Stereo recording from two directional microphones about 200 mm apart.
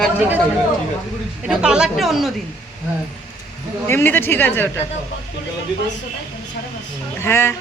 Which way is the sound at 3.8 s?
10° left (ahead or behind).